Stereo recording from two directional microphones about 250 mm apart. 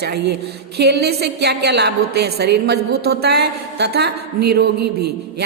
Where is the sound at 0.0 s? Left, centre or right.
Right.